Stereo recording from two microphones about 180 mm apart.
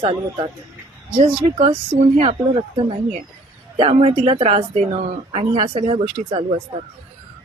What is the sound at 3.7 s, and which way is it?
Speech, 30° right (ahead or behind).